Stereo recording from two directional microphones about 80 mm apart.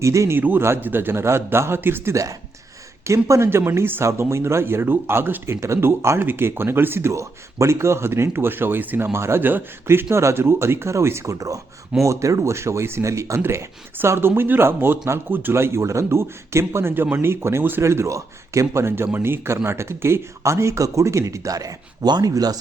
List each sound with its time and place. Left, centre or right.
0.0 s speech: right
0.3 s speech: right
3.1 s speech: right
9.1 s speech: right